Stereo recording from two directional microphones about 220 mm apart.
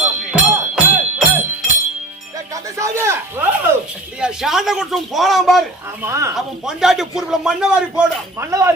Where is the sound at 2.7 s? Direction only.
15° right (ahead or behind).